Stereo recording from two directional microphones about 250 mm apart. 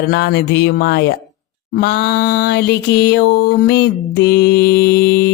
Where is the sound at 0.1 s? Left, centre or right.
Left.